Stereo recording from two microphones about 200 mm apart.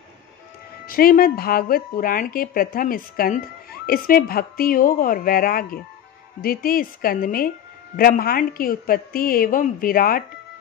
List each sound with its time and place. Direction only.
0.8 s speech: 45° left (ahead or behind)